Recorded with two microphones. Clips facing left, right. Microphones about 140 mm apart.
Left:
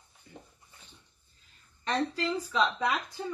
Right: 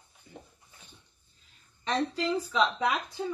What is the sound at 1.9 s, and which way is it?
A woman's voice, 20° right (ahead or behind).